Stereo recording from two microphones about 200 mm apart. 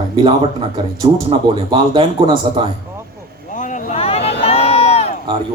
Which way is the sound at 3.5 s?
40° left (ahead or behind).